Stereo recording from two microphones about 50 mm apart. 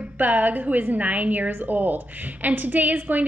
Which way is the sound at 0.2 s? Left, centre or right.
Right.